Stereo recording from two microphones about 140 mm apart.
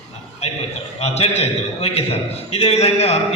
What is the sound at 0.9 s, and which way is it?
A man's voice, 50° left (ahead or behind).